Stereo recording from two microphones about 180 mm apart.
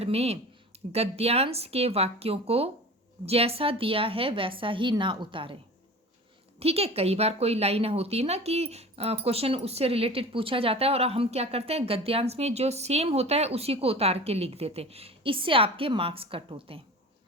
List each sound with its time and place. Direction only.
0.0 s a woman's voice: 35° right (ahead or behind)
6.6 s a woman's voice: 35° right (ahead or behind)